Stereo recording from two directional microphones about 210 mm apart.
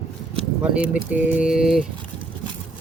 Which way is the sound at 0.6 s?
5° right (ahead or behind).